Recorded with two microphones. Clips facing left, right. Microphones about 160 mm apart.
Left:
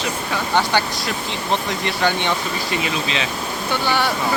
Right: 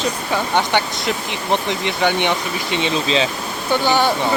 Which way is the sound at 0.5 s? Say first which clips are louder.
Left 2 dB; 20° right (ahead or behind).